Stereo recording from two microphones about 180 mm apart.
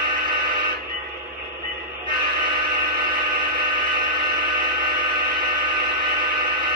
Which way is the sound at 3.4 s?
25° right (ahead or behind).